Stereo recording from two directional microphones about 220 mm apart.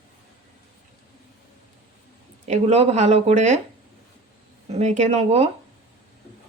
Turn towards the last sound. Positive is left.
turn(degrees=-30)  # may be behind; listen again after turning